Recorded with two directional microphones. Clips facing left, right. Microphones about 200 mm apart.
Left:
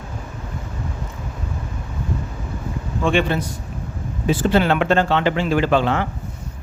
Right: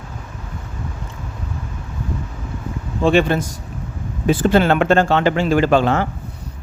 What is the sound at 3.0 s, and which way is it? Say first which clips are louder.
Speech: right 4 dB; 40° right (ahead or behind).